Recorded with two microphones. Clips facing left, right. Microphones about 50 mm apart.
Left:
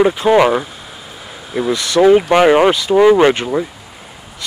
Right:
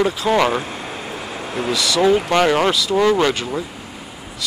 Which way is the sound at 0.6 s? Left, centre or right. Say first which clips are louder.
Right 3 dB; right.